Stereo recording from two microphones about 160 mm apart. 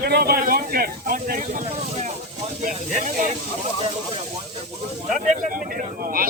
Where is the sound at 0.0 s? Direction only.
75° right (ahead or behind); by 3.3 s 45° right (ahead or behind).